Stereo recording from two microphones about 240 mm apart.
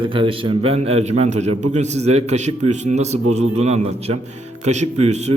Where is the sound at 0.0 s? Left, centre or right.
Right.